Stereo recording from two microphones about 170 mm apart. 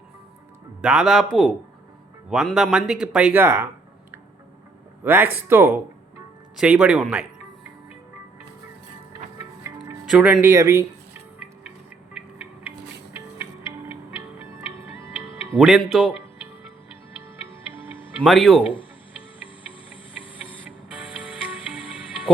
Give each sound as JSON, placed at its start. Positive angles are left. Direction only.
{"t": 0.8, "sound": "speech", "side_deg": -5}
{"t": 5.0, "sound": "speech", "side_deg": -10}
{"t": 9.6, "sound": "music", "side_deg": -15}
{"t": 10.1, "sound": "music", "side_deg": -5}
{"t": 14.9, "sound": "tick-tock", "side_deg": -15}
{"t": 15.5, "sound": "speech", "side_deg": 0}
{"t": 18.2, "sound": "speech", "side_deg": 0}
{"t": 18.6, "sound": "speech", "side_deg": 30}